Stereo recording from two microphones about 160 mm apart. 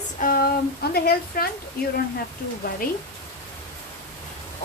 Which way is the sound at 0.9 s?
70° left (ahead or behind).